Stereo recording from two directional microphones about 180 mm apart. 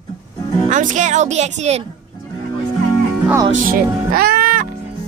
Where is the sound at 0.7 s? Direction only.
45° right (ahead or behind).